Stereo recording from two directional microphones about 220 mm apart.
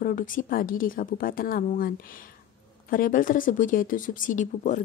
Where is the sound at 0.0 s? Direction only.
35° left (ahead or behind).